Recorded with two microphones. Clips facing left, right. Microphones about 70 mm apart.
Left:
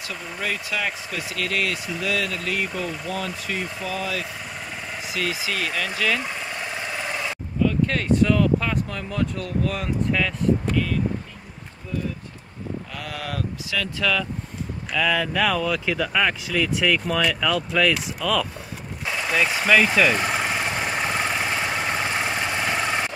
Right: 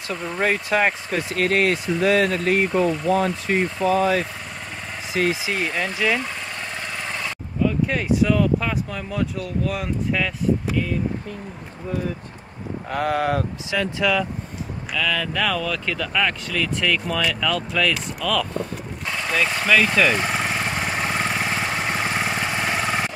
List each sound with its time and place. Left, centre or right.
0.4 s speech: right; by 6.2 s centre
6.8 s engine: centre
7.6 s speech: centre
12.9 s speech: right; by 14.2 s centre
15.0 s speech: centre
18.6 s vehicle: centre